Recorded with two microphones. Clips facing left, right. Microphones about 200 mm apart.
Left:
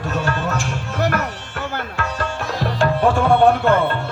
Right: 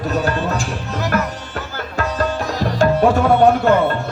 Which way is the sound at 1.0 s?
60° left (ahead or behind).